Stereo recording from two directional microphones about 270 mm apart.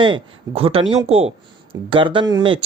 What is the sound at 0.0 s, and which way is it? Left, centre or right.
Speech, centre.